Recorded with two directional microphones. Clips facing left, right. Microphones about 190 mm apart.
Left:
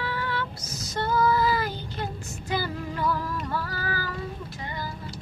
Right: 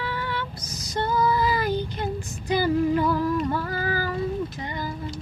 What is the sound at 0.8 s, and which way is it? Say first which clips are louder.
Female singing: right 1 dB; 15° right (ahead or behind).